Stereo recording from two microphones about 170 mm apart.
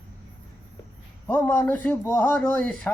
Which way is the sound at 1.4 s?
15° left (ahead or behind).